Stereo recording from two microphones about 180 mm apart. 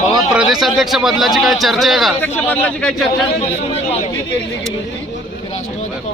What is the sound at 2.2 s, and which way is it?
Speech, 10° left (ahead or behind).